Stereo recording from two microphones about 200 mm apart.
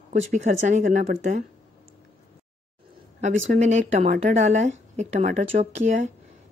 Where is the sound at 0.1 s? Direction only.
35° right (ahead or behind).